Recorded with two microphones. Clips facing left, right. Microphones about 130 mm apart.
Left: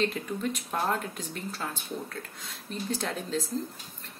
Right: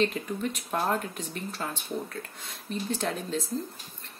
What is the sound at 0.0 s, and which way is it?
Speech, 5° right (ahead or behind).